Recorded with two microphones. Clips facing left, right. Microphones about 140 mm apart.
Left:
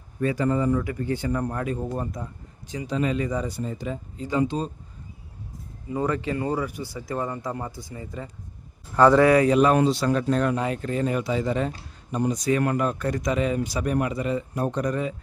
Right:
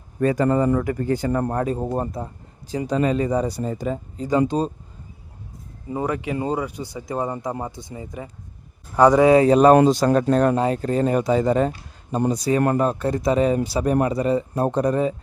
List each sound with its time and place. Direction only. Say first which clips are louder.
0.2 s a man's voice: right 5 dB; 45° right (ahead or behind)
5.9 s a man's voice: right 1 dB; 15° right (ahead or behind); by 15.1 s 35° right (ahead or behind)